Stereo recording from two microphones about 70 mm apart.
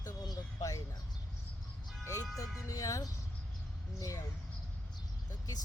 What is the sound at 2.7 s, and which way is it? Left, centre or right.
Speech, left.